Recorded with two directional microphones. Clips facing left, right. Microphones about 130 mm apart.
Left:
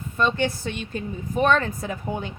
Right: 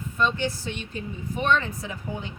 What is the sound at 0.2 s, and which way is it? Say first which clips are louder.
A woman's voice: left 3 dB; 55° left (ahead or behind).